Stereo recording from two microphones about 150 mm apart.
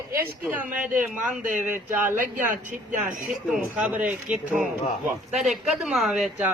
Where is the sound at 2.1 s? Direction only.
60° right (ahead or behind).